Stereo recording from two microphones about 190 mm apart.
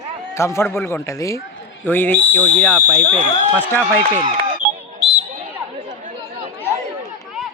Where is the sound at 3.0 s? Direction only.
35° right (ahead or behind).